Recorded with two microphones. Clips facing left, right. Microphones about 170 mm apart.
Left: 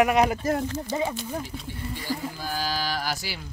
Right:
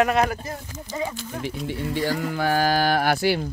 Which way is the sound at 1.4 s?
75° right (ahead or behind).